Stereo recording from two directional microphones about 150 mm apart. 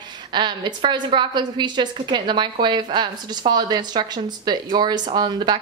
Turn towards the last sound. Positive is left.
turn(degrees=-30)  # may be behind; listen again after turning